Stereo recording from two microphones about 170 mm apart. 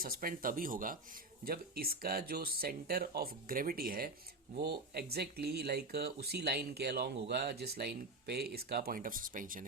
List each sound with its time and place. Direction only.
0.0 s speech: 55° right (ahead or behind)